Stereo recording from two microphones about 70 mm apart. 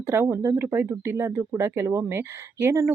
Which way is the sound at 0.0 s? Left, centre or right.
Right.